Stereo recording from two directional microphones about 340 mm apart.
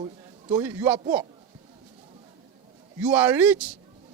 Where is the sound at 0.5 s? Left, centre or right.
Centre.